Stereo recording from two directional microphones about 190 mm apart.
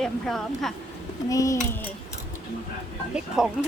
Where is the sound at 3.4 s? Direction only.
Centre (ahead or behind).